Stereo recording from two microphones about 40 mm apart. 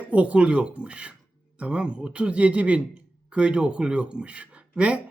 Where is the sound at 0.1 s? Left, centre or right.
Right.